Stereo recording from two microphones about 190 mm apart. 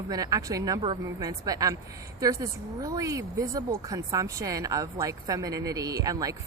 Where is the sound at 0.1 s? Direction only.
20° right (ahead or behind).